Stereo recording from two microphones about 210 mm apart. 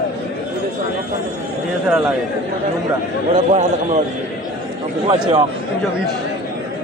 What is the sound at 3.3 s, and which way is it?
Speech, 35° right (ahead or behind).